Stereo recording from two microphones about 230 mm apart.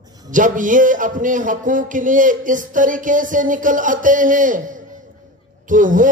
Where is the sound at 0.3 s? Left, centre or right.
Right.